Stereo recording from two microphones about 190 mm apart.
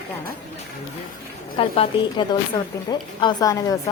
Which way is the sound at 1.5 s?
30° left (ahead or behind).